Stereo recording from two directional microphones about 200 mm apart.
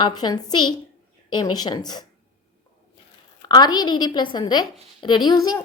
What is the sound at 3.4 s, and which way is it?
A woman's voice, 20° left (ahead or behind).